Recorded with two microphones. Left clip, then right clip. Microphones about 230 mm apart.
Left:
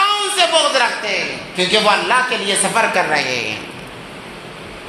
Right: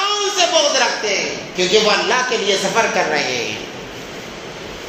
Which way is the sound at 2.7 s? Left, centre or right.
Left.